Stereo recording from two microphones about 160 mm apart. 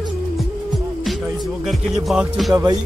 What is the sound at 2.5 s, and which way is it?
Speech, 25° right (ahead or behind).